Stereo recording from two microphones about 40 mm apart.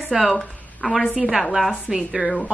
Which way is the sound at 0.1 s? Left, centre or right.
Centre.